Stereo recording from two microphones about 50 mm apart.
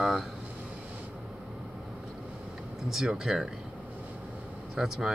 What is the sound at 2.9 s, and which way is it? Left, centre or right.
Speech, centre.